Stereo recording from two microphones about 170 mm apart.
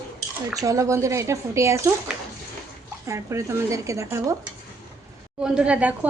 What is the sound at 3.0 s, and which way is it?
A woman's voice, 15° right (ahead or behind).